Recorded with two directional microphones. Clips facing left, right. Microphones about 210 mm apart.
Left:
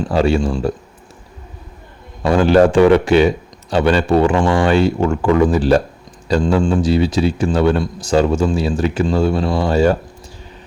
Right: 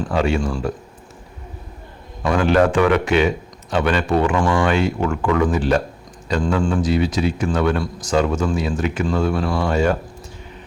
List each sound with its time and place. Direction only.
0.1 s a man's voice: 35° left (ahead or behind)
2.2 s a man's voice: 30° left (ahead or behind)